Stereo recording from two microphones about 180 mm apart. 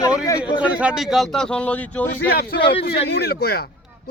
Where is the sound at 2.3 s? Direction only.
60° left (ahead or behind).